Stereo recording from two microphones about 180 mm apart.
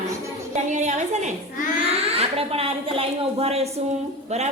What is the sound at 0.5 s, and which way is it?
A woman's voice, 40° right (ahead or behind).